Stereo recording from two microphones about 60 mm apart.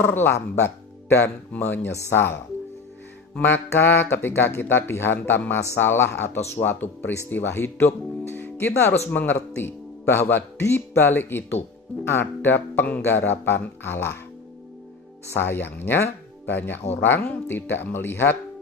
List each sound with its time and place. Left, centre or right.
0.0 s speech: left
2.0 s speech: left
3.3 s speech: left
15.3 s speech: left